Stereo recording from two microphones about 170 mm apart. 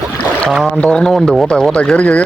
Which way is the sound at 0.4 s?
Centre (ahead or behind).